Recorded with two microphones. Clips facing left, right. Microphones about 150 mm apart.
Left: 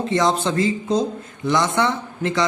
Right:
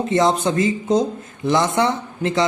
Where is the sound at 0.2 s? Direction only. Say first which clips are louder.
Right 2 dB; 20° right (ahead or behind).